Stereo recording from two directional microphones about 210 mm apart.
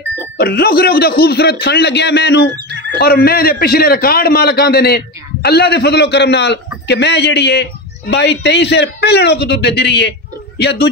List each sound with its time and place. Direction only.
0.4 s a man's voice: 45° left (ahead or behind)